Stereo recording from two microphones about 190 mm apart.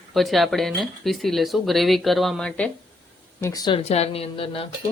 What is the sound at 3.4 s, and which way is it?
Speech, 20° left (ahead or behind).